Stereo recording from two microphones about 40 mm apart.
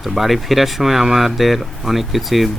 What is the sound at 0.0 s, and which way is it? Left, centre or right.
Speech, centre.